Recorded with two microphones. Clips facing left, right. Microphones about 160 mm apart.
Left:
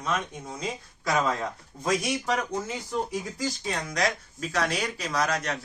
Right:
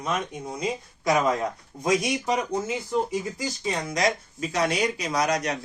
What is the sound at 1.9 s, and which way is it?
Speech, 5° right (ahead or behind).